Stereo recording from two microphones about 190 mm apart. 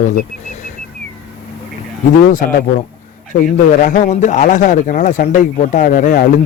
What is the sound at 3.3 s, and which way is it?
Speech, 40° left (ahead or behind).